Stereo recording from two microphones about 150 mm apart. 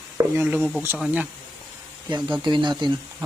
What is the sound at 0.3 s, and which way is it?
Speech, 15° right (ahead or behind).